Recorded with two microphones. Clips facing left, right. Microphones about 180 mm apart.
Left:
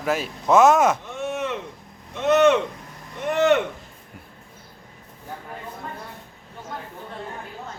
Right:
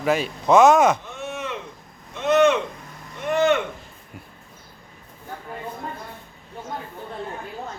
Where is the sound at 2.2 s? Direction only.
60° left (ahead or behind).